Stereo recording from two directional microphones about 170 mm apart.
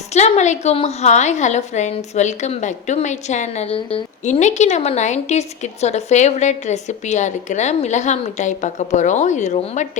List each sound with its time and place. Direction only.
0.1 s a woman's voice: 40° left (ahead or behind)